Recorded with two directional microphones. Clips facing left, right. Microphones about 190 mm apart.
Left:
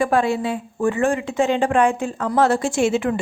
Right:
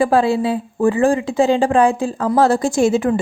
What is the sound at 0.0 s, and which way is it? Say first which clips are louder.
A woman's voice: right 4 dB; 30° right (ahead or behind).